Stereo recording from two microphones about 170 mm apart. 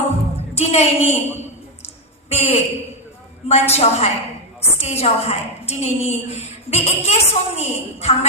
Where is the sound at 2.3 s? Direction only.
35° left (ahead or behind).